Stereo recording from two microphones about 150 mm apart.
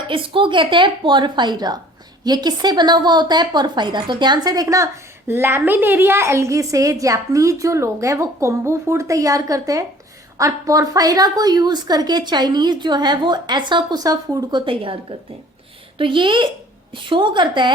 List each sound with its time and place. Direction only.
0.1 s a woman's voice: 35° right (ahead or behind)
16.0 s a woman's voice: 35° right (ahead or behind)